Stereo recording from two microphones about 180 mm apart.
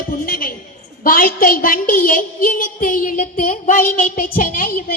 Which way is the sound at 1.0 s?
50° left (ahead or behind).